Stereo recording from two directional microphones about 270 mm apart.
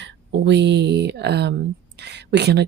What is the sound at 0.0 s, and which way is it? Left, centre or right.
Speech, right.